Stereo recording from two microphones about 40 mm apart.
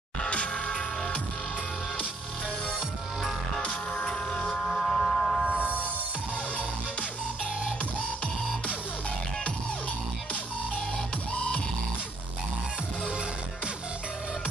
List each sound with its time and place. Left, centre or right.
0.2 s music: left
3.6 s music: left
4.6 s music: centre
11.3 s music: left